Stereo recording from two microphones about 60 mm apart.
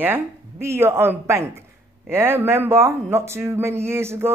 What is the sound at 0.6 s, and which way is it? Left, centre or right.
Speech, right.